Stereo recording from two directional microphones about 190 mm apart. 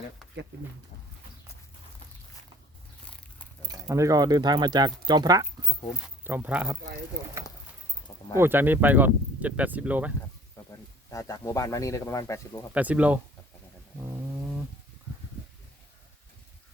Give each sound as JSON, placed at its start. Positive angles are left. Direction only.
{"t": 3.1, "sound": "a sound", "side_deg": 5}
{"t": 3.7, "sound": "speech", "side_deg": -15}
{"t": 6.2, "sound": "speech", "side_deg": -10}
{"t": 8.4, "sound": "speech", "side_deg": -10}
{"t": 10.7, "sound": "speech", "side_deg": 15}
{"t": 12.7, "sound": "speech", "side_deg": -5}